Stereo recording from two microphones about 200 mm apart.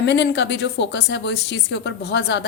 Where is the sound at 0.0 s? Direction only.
60° left (ahead or behind).